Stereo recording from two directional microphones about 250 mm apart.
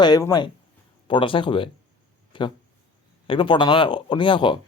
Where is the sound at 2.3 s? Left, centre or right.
Centre.